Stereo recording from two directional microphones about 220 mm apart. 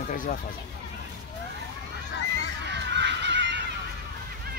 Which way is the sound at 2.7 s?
50° right (ahead or behind).